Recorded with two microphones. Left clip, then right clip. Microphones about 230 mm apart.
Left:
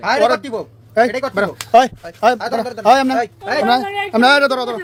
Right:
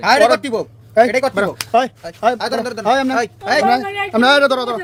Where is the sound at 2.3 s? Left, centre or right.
Right.